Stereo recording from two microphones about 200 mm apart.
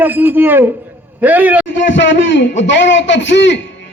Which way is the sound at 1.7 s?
65° left (ahead or behind).